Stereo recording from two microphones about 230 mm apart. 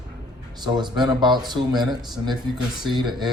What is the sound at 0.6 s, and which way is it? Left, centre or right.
Speech, centre.